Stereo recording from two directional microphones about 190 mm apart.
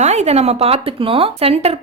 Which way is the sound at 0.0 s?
35° right (ahead or behind).